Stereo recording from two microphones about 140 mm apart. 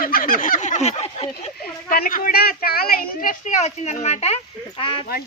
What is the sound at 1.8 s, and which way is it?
A woman's voice, 85° left.